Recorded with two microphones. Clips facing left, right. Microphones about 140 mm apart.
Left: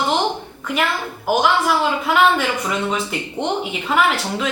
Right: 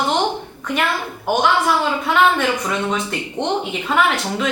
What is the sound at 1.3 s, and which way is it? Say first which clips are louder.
A man's voice: even; 5° left (ahead or behind).